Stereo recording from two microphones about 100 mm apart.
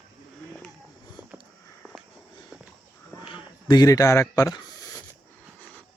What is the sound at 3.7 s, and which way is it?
Speech, 40° left (ahead or behind).